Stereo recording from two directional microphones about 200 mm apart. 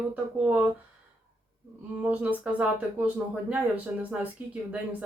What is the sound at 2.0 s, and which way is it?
Speech, 5° right (ahead or behind).